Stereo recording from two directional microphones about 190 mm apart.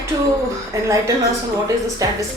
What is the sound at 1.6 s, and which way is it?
Speech, 15° right (ahead or behind).